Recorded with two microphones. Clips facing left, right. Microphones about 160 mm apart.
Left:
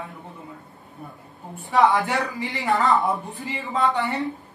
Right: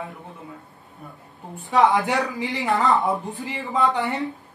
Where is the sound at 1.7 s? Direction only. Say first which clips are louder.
Right 1 dB; 20° right (ahead or behind).